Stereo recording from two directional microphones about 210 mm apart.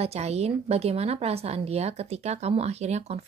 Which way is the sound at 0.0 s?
30° right (ahead or behind).